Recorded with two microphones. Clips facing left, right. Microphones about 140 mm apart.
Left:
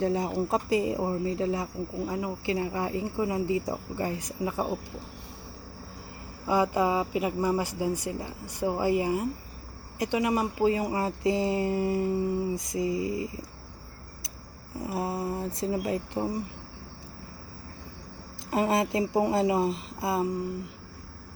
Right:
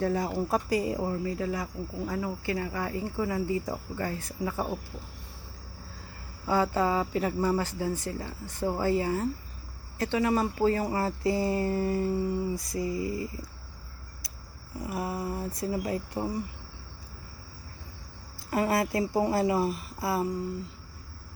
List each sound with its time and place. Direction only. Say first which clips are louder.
0.0 s speech: left 1 dB; 20° left (ahead or behind)
6.5 s speech: left 1 dB; 15° left (ahead or behind)
14.8 s speech: left 2 dB; 25° left (ahead or behind)
18.5 s speech: left 1 dB; 20° left (ahead or behind)